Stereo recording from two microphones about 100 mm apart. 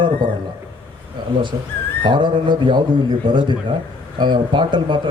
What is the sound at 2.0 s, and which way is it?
A man's voice, 50° right (ahead or behind).